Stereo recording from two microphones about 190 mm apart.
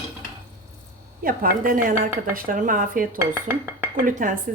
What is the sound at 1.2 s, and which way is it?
Speech, 50° right (ahead or behind).